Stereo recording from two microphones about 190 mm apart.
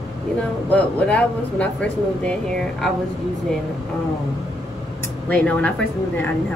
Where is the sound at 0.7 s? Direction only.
5° left (ahead or behind).